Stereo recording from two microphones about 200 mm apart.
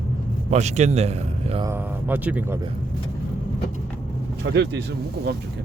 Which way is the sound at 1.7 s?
10° right (ahead or behind).